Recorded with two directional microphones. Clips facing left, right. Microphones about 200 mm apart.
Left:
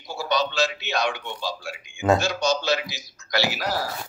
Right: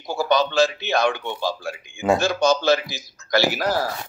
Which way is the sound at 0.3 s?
50° right (ahead or behind).